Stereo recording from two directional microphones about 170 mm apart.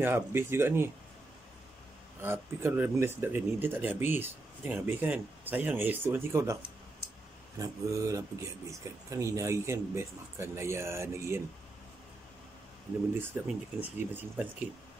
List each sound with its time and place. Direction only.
0.0 s speech: 15° right (ahead or behind)
2.2 s speech: 15° right (ahead or behind)
13.4 s speech: 10° right (ahead or behind)